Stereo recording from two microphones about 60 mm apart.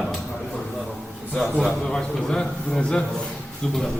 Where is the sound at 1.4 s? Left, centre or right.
Centre.